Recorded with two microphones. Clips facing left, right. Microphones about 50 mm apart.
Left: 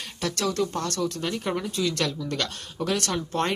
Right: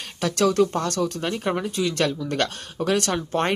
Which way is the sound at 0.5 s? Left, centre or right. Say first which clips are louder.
Right 5 dB; right.